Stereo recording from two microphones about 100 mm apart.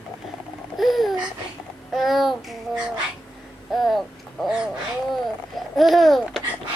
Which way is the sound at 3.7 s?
Centre (ahead or behind).